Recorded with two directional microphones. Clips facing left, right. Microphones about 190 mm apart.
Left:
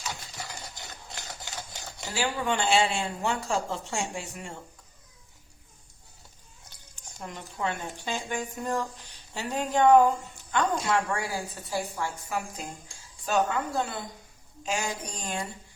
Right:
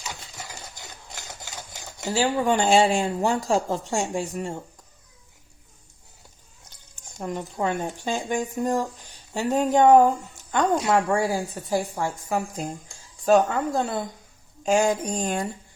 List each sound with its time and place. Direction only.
2.0 s speech: 40° right (ahead or behind)
6.9 s a woman's voice: 45° right (ahead or behind)